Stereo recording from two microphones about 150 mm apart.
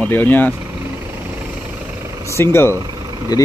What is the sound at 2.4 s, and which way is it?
Speech, 15° left (ahead or behind).